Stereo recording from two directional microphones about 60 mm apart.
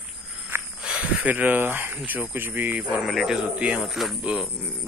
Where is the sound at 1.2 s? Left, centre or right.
Right.